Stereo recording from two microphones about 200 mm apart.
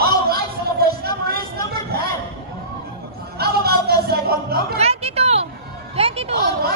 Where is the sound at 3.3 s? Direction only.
50° right (ahead or behind).